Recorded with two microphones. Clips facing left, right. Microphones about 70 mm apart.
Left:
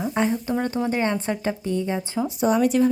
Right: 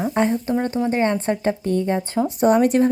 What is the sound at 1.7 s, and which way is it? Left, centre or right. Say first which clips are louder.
Speech: right 4 dB; right.